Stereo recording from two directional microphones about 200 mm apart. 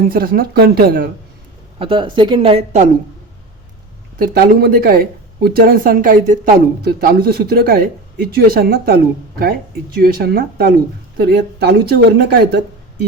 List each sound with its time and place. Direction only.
0.1 s speech: 45° right (ahead or behind)
1.8 s speech: 25° right (ahead or behind)
4.2 s speech: 50° right (ahead or behind)